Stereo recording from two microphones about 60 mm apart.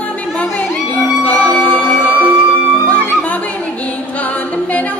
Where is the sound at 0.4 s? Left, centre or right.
Left.